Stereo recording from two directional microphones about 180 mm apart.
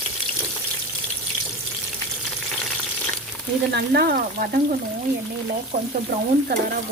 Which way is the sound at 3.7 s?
60° right (ahead or behind).